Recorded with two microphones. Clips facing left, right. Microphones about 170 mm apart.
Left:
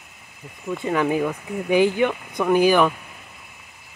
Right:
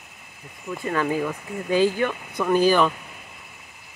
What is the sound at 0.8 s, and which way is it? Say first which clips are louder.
Speech: left 3 dB; 15° left (ahead or behind).